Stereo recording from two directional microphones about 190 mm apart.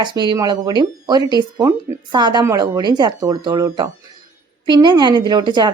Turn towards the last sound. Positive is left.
turn(degrees=-25)  # may be behind; listen again after turning